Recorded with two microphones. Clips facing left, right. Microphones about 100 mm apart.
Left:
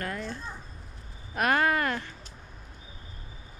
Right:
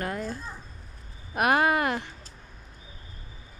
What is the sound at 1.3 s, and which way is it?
Speech, 15° right (ahead or behind).